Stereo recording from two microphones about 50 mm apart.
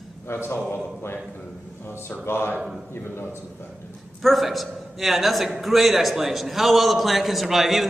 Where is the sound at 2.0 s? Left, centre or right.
Left.